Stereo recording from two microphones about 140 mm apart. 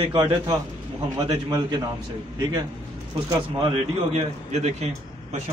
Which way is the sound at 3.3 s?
30° right (ahead or behind).